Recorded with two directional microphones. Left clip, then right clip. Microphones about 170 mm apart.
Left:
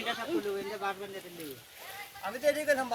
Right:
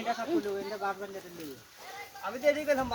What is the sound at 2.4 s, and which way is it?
Speech, 45° right (ahead or behind).